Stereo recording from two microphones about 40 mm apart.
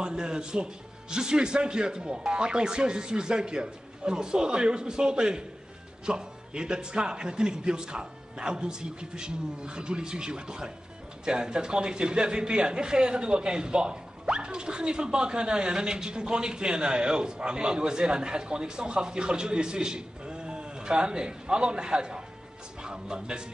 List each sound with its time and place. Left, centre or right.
0.0 s a man's voice: right